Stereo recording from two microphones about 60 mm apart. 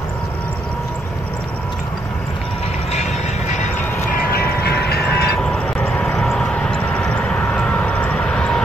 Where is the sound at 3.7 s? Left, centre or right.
Left.